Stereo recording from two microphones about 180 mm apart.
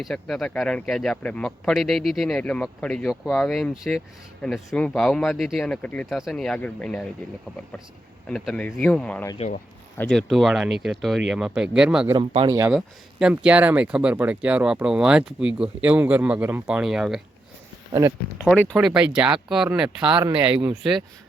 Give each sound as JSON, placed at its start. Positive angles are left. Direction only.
{"t": 0.0, "sound": "speech", "side_deg": 0}
{"t": 8.3, "sound": "speech", "side_deg": 5}
{"t": 12.1, "sound": "speech", "side_deg": -30}
{"t": 12.5, "sound": "speech", "side_deg": -15}
{"t": 12.7, "sound": "speech", "side_deg": -5}
{"t": 18.9, "sound": "speech", "side_deg": -5}
{"t": 20.1, "sound": "speech", "side_deg": -25}
{"t": 20.4, "sound": "speech", "side_deg": -10}